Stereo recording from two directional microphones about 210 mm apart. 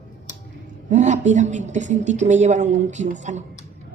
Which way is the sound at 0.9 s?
35° right (ahead or behind).